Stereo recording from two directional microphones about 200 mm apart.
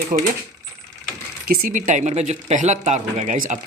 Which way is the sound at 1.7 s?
40° right (ahead or behind).